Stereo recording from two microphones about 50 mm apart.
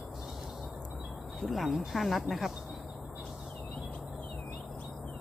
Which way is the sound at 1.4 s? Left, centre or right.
Centre.